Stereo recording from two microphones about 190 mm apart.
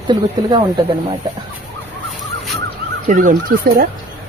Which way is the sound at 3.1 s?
45° right (ahead or behind).